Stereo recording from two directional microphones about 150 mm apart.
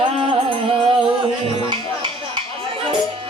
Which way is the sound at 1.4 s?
35° right (ahead or behind).